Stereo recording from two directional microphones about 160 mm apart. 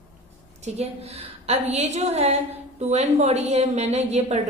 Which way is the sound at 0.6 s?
40° right (ahead or behind).